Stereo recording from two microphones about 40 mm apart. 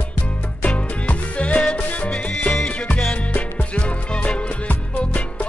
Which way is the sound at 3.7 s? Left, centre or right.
Left.